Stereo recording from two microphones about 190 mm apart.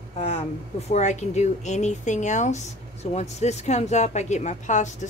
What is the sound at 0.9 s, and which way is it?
A woman's voice, 40° left (ahead or behind).